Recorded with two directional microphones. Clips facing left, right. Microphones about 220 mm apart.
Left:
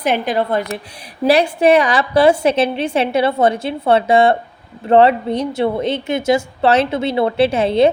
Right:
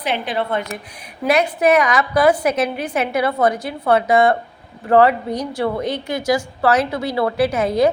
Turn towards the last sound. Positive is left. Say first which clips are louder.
# left 3 dB
turn(degrees=30)  # may be behind; listen again after turning